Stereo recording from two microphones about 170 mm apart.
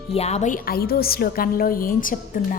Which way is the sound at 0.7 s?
65° left (ahead or behind).